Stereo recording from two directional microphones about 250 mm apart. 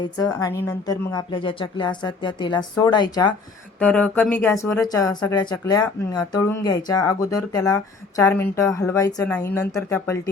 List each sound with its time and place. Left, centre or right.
0.0 s speech: centre
3.8 s speech: centre